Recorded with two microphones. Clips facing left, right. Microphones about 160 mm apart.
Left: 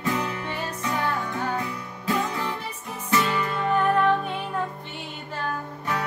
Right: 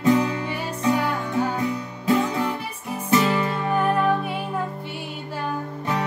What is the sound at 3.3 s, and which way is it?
Music, 15° right (ahead or behind).